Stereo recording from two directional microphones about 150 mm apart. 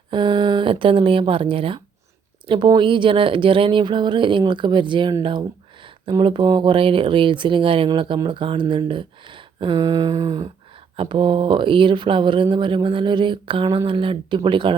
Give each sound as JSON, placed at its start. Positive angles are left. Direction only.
{"t": 0.1, "sound": "speech", "side_deg": -30}